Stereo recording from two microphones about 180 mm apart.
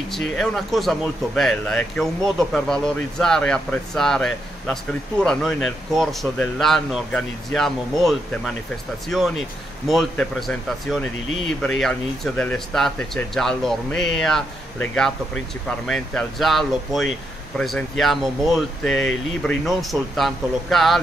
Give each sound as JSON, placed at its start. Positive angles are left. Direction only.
{"t": 0.1, "sound": "speech", "side_deg": 5}
{"t": 9.8, "sound": "speech", "side_deg": 0}